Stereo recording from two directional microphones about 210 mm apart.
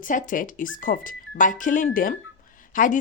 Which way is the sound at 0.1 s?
40° left (ahead or behind).